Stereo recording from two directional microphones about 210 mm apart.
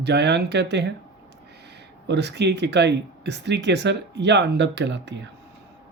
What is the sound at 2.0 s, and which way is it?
Speech, 55° right (ahead or behind).